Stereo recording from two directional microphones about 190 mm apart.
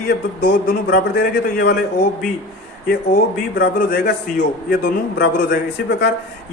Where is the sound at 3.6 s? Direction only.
55° left (ahead or behind).